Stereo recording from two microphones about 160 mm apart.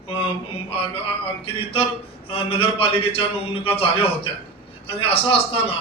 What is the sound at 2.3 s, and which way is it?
A man's voice, 35° left (ahead or behind).